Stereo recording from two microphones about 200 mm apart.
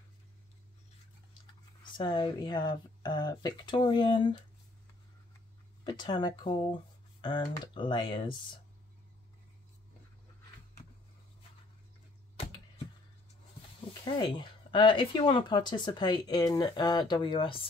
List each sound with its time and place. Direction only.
1.9 s speech: 25° left (ahead or behind)
5.9 s speech: 20° left (ahead or behind)
14.0 s speech: 25° left (ahead or behind)